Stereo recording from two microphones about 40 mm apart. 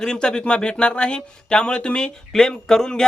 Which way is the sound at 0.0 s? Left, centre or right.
Centre.